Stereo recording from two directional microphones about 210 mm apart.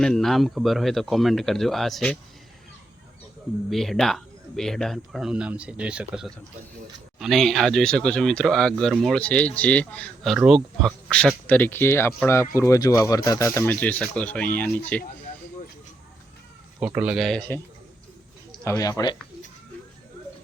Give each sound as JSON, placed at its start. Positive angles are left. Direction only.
{"t": 0.0, "sound": "speech", "side_deg": 0}
{"t": 3.7, "sound": "speech", "side_deg": 0}
{"t": 16.8, "sound": "speech", "side_deg": -5}
{"t": 18.6, "sound": "speech", "side_deg": 15}